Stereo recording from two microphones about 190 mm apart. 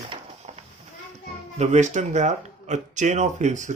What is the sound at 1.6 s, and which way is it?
Speech, 35° right (ahead or behind).